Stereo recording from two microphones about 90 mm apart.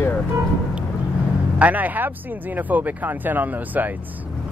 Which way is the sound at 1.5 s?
15° right (ahead or behind).